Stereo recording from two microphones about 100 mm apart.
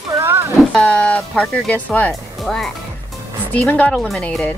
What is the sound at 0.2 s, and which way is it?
Music, 25° right (ahead or behind).